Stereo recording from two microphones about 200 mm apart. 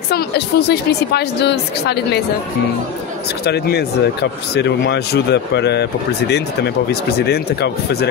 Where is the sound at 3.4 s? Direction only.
55° left (ahead or behind).